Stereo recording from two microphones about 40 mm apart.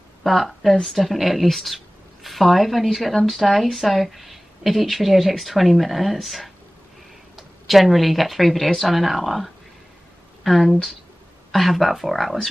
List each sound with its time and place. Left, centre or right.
0.2 s a woman's voice: centre